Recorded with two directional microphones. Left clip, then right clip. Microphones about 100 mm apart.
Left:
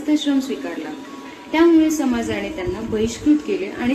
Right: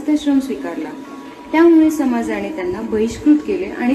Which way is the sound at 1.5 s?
40° right (ahead or behind).